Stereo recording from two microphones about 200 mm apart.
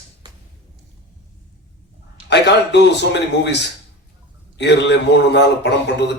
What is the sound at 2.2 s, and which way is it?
A man's voice, 60° left (ahead or behind).